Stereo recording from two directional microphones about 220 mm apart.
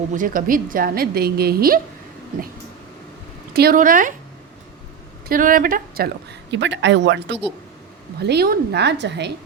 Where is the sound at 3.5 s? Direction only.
45° right (ahead or behind).